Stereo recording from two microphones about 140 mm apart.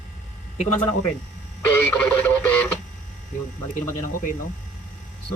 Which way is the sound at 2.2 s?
10° left (ahead or behind).